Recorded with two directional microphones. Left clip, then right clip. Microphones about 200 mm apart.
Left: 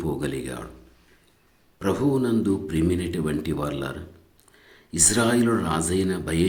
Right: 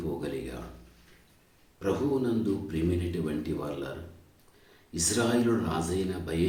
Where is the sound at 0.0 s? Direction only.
45° left (ahead or behind).